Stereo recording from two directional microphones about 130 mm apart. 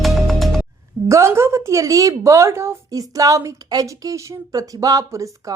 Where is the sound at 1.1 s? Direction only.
20° right (ahead or behind).